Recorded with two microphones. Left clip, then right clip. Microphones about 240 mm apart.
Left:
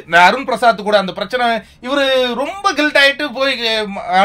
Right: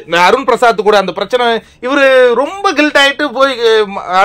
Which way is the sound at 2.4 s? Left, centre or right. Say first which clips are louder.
Right 4 dB; centre.